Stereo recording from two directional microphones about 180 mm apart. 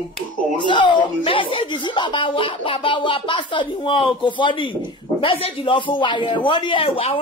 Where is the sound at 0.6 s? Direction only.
25° left (ahead or behind).